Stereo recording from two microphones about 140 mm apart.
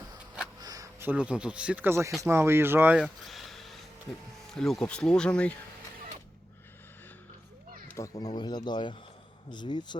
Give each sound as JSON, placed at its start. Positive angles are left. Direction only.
{"t": 0.6, "sound": "speech", "side_deg": -25}
{"t": 3.2, "sound": "a sound", "side_deg": 0}
{"t": 4.5, "sound": "speech", "side_deg": 5}
{"t": 7.9, "sound": "speech", "side_deg": 20}